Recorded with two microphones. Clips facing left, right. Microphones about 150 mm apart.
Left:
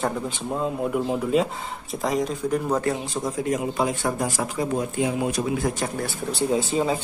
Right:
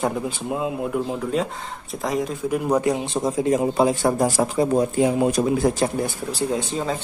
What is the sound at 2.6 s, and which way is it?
A man's voice, 15° right (ahead or behind).